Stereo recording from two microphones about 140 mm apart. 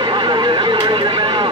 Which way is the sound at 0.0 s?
35° right (ahead or behind).